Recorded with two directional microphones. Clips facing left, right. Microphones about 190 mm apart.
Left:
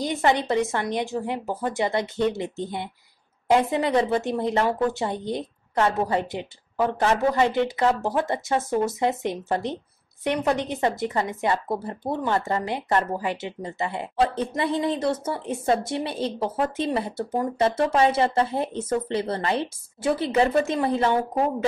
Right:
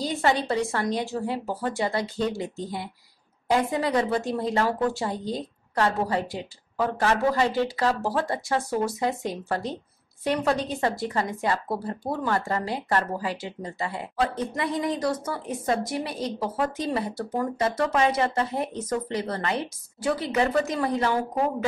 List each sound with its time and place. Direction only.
0.0 s a woman's voice: 20° left (ahead or behind)